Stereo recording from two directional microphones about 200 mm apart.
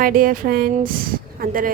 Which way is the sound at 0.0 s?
45° right (ahead or behind).